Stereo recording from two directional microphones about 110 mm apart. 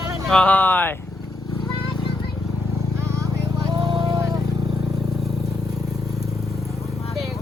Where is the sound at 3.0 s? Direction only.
30° right (ahead or behind); by 4.2 s 45° right (ahead or behind).